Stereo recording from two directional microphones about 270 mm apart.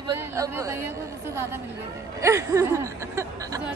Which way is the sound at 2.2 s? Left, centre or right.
Centre.